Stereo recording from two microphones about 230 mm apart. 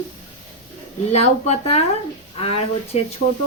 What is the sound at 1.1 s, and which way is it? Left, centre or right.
Speech, left.